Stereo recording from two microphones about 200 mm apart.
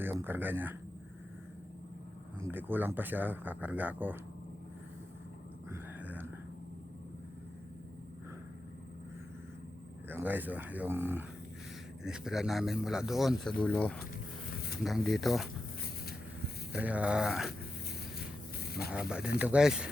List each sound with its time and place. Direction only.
0.0 s speech: 10° right (ahead or behind)
2.4 s speech: 10° right (ahead or behind)
5.7 s a sound: 10° right (ahead or behind)
10.1 s a man's voice: 10° right (ahead or behind); by 14.0 s 5° left (ahead or behind)
14.5 s a sound: 50° left (ahead or behind)
14.8 s a man's voice: centre (ahead or behind)
16.7 s a man's voice: 5° right (ahead or behind)
18.2 s a sound: 50° left (ahead or behind)
18.9 s a man's voice: 5° right (ahead or behind)